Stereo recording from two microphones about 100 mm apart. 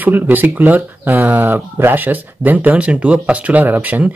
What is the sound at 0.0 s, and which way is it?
Speech, 20° right (ahead or behind).